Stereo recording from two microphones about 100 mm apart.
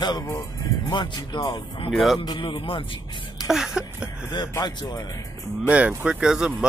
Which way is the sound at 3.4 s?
5° right (ahead or behind).